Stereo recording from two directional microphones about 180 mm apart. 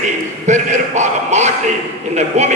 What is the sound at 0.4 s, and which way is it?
A man's voice, 40° right (ahead or behind).